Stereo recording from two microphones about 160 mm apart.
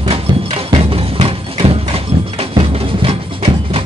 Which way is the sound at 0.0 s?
40° right (ahead or behind).